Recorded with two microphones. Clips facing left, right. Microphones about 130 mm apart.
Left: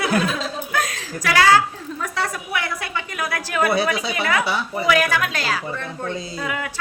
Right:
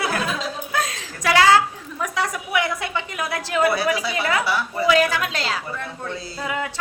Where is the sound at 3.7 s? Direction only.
20° left (ahead or behind).